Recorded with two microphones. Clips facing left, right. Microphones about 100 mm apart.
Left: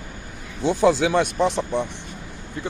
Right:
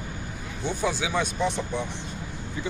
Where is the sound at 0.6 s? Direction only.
90° left; by 1.8 s 70° left (ahead or behind).